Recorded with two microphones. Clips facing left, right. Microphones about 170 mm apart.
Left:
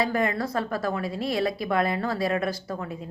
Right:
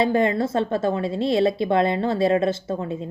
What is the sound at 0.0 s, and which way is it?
A woman's voice, 25° right (ahead or behind).